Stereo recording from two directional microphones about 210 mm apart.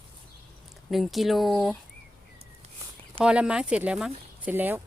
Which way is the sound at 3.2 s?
5° right (ahead or behind).